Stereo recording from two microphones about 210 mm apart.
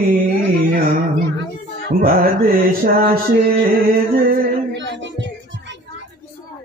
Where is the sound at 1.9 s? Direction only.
45° right (ahead or behind).